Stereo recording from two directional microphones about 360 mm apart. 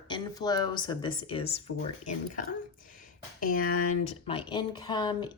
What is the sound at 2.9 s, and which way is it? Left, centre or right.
Speech, left.